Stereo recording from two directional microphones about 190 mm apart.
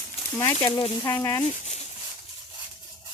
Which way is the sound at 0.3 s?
20° left (ahead or behind).